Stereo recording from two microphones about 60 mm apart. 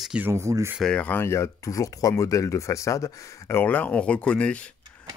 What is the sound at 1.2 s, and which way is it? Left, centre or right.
Speech, left.